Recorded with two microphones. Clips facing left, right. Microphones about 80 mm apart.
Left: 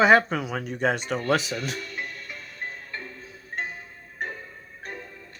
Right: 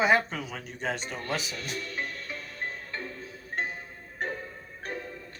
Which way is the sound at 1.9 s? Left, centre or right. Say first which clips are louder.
Even; centre.